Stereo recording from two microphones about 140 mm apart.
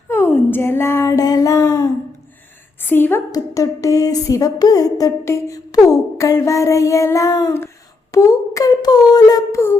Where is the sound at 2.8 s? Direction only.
15° left (ahead or behind).